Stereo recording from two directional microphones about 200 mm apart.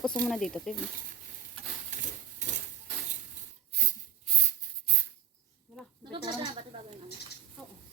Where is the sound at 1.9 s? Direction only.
40° right (ahead or behind).